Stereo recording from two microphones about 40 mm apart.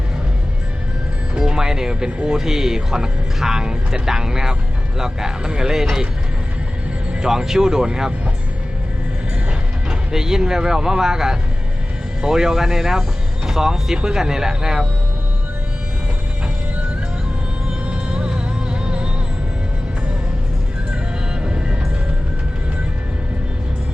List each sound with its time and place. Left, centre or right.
1.4 s music: centre
2.2 s speech: centre
7.1 s speech: centre
10.1 s speech: centre
17.8 s music: right
21.4 s music: right